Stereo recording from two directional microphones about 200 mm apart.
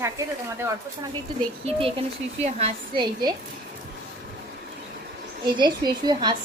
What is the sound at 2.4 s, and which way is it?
Speech, 30° right (ahead or behind).